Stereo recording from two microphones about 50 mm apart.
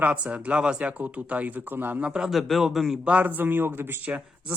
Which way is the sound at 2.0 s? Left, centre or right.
Right.